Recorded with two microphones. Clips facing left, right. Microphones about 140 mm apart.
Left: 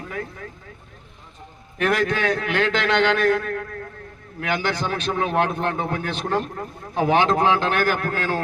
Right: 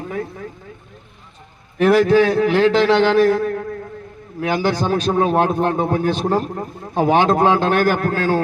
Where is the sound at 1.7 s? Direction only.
35° right (ahead or behind).